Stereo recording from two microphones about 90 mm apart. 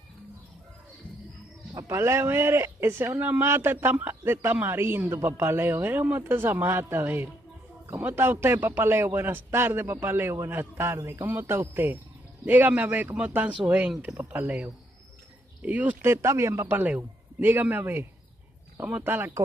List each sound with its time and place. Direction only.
1.7 s a man's voice: 35° right (ahead or behind); by 14.1 s 15° right (ahead or behind)
14.1 s a man's voice: 30° right (ahead or behind)
15.6 s a man's voice: 15° right (ahead or behind)
16.6 s a man's voice: 20° right (ahead or behind)